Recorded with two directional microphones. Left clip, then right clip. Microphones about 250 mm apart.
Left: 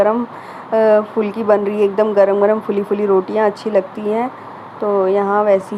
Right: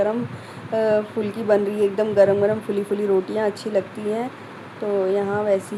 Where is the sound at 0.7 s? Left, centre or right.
Centre.